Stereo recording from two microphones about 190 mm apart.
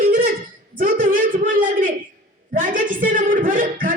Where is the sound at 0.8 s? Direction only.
45° right (ahead or behind).